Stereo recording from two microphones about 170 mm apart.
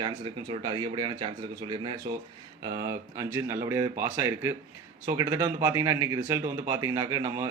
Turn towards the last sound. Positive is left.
turn(degrees=-15)  # may be behind; listen again after turning